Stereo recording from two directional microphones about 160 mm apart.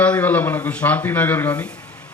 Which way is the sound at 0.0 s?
10° left (ahead or behind).